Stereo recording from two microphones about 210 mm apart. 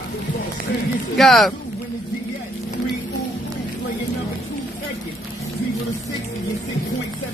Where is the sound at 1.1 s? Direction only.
Centre (ahead or behind).